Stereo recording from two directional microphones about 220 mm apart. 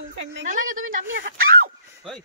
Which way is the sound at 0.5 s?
35° right (ahead or behind).